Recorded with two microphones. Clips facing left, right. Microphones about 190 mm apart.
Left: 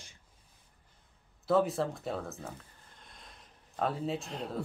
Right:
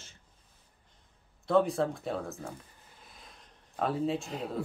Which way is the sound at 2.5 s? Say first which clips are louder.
Right 2 dB; 5° right (ahead or behind).